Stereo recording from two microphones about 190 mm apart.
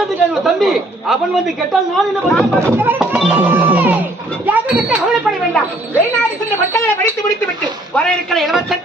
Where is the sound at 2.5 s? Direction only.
10° right (ahead or behind).